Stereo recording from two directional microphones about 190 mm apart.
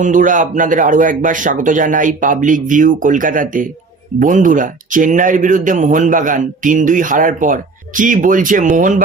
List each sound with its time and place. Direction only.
0.0 s speech: 45° right (ahead or behind)